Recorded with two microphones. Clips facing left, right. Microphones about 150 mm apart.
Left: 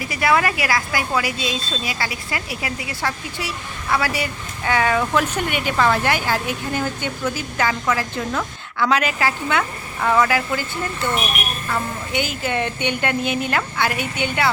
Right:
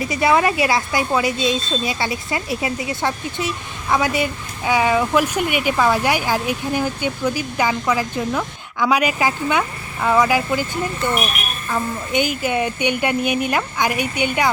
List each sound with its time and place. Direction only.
0.0 s a woman's voice: 25° right (ahead or behind)
11.7 s a woman's voice: 15° right (ahead or behind)